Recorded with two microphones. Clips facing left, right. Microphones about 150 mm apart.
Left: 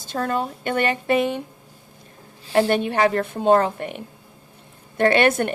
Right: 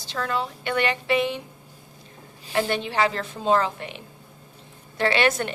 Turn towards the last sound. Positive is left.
turn(degrees=50)  # may be behind; listen again after turning